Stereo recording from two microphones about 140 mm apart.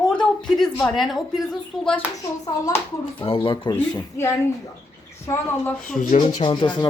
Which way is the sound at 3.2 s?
40° left (ahead or behind).